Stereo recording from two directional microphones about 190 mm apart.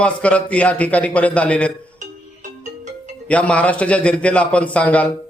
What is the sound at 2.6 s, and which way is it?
Music, 40° right (ahead or behind).